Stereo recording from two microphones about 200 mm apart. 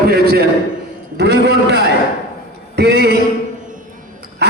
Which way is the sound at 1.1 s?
55° right (ahead or behind).